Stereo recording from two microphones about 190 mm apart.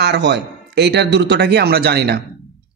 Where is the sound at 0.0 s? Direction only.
65° right (ahead or behind).